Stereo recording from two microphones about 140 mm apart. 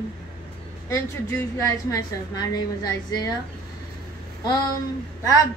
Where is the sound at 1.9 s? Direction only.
25° left (ahead or behind).